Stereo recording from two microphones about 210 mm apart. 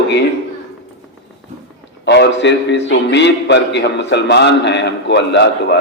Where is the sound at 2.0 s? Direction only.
55° left (ahead or behind).